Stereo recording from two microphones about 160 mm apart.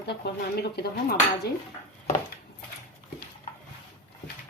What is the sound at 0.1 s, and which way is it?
Speech, 80° left.